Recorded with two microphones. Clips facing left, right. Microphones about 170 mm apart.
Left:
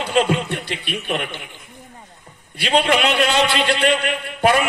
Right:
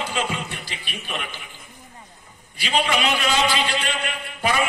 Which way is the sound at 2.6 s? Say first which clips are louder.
Left 5 dB; 65° left (ahead or behind).